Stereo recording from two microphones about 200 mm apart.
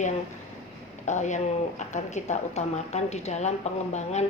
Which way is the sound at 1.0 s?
35° left (ahead or behind).